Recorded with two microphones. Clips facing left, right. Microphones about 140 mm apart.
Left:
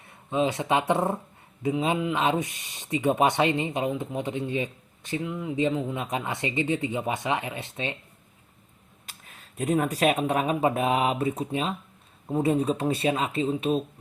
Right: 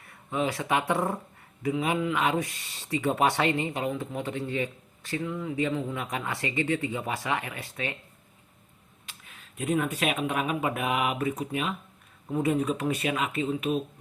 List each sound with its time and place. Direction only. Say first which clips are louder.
0.0 s speech: left 4 dB; 20° left (ahead or behind)
9.0 s speech: left 1 dB; 40° left (ahead or behind)